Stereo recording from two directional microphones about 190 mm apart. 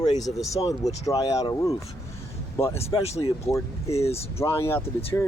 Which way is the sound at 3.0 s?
35° left (ahead or behind).